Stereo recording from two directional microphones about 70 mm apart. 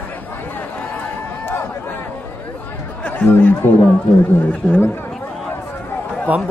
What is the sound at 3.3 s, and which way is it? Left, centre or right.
Speech, left.